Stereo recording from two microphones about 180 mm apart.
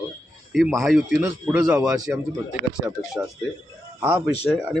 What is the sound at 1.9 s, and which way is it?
A man's voice, 20° right (ahead or behind).